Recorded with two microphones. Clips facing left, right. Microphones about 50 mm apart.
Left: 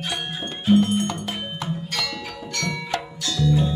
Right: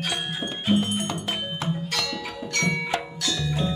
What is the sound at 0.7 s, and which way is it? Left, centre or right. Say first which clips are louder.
Music: left 6 dB; centre.